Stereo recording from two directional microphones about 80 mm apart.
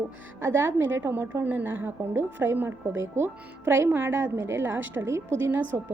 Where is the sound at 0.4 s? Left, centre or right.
Right.